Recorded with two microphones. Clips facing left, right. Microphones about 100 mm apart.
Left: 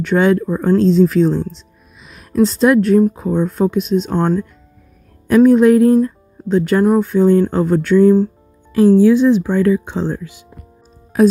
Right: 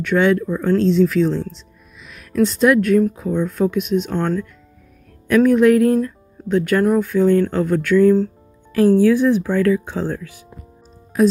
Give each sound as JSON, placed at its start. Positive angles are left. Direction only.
{"t": 0.0, "sound": "speech", "side_deg": 35}
{"t": 5.3, "sound": "speech", "side_deg": 30}
{"t": 8.7, "sound": "speech", "side_deg": 20}